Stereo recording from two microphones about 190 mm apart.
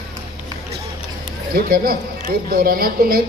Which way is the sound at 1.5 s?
50° right (ahead or behind).